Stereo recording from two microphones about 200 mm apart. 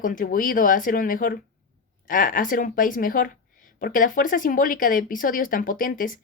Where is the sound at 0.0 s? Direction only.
45° left (ahead or behind).